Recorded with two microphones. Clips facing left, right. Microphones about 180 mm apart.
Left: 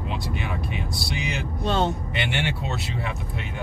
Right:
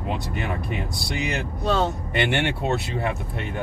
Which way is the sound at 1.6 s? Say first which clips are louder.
Right 1 dB; 5° right (ahead or behind).